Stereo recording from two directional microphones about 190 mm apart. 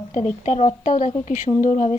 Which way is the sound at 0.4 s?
40° left (ahead or behind).